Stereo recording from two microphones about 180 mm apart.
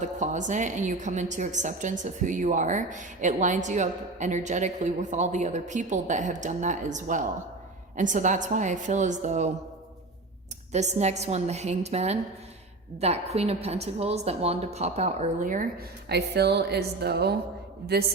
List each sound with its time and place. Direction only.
0.0 s a woman's voice: 45° right (ahead or behind)
10.7 s a woman's voice: 40° right (ahead or behind)
16.0 s speech: 65° right (ahead or behind)